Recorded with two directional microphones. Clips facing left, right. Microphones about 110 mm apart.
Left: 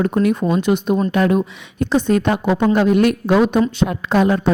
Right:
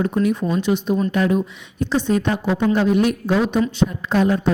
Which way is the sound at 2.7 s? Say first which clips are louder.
Left 3 dB; 70° left (ahead or behind).